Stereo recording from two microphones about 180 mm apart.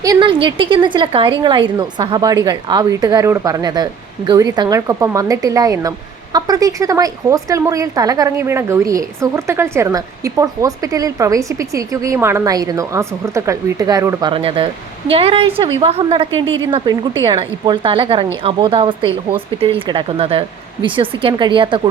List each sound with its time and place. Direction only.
0.0 s a woman's voice: 20° right (ahead or behind)